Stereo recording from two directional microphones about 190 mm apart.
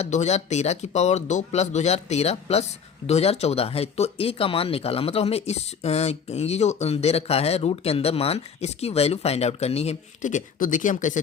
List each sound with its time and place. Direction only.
0.0 s speech: 35° left (ahead or behind)